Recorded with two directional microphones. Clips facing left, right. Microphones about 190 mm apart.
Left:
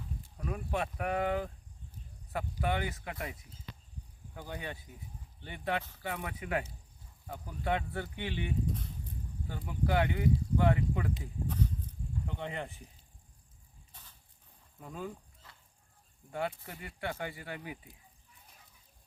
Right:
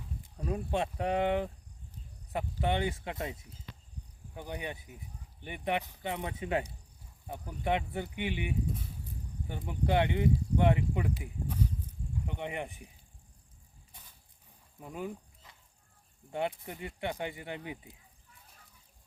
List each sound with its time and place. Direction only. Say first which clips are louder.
0.3 s speech: right 3 dB; 25° right (ahead or behind)
14.8 s a sound: right 2 dB; 15° right (ahead or behind)
16.3 s speech: right 2 dB; 20° right (ahead or behind)